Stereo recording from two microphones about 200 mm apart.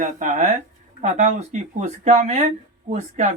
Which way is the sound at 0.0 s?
40° right (ahead or behind).